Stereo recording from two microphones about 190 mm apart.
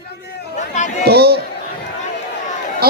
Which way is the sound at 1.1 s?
55° right (ahead or behind).